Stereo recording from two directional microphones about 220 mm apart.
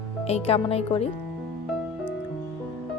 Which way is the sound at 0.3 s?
25° left (ahead or behind).